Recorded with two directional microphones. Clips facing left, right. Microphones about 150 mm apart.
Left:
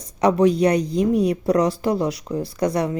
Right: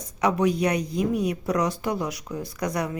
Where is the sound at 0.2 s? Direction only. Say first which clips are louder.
Left 6 dB; 35° left (ahead or behind).